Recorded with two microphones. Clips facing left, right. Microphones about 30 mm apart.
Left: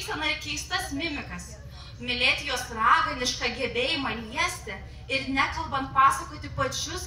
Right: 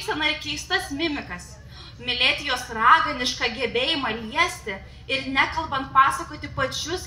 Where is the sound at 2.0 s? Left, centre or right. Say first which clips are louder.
Right 3 dB; right.